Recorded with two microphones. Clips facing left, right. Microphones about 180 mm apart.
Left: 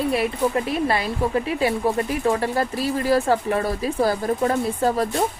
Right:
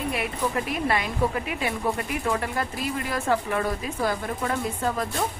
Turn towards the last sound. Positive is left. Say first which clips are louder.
# left 6 dB
turn(degrees=35)  # may be behind; listen again after turning